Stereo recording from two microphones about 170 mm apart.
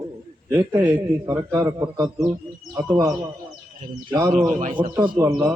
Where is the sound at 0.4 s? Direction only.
15° right (ahead or behind).